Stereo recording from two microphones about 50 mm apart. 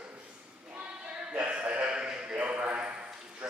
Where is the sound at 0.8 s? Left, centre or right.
Right.